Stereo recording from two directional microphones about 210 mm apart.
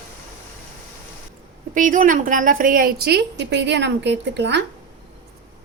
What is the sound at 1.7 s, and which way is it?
Speech, 40° right (ahead or behind).